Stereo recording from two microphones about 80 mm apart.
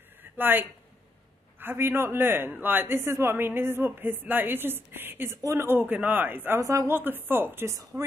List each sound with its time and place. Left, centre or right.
0.2 s a sound: right
1.6 s a woman's voice: right
7.0 s a woman's voice: right